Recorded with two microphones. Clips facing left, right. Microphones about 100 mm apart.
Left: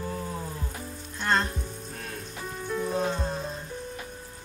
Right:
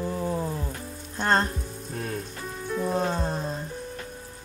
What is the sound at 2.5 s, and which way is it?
Frying, centre (ahead or behind).